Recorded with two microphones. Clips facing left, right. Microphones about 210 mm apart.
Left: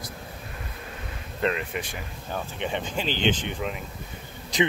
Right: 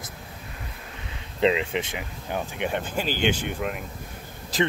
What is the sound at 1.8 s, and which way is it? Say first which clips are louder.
Speech: right 4 dB; 20° right (ahead or behind).